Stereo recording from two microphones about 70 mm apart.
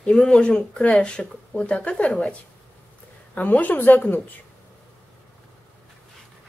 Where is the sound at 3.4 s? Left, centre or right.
Left.